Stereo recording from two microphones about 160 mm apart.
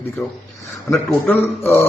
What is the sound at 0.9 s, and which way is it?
A man's voice, 15° left (ahead or behind).